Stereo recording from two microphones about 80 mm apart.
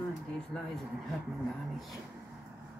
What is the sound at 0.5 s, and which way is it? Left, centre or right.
Speech, centre.